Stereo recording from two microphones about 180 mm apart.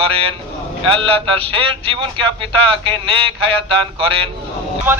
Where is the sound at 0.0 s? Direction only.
30° right (ahead or behind).